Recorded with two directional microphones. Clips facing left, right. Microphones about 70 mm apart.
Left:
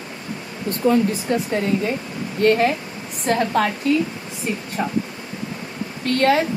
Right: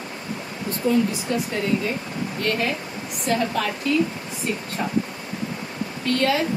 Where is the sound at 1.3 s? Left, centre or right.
Left.